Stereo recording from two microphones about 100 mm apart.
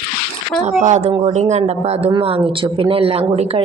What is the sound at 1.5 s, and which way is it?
Speech, 90° right.